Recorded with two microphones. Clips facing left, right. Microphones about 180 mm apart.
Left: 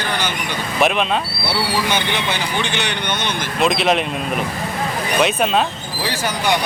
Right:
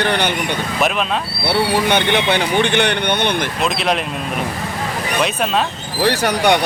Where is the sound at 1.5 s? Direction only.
60° right (ahead or behind).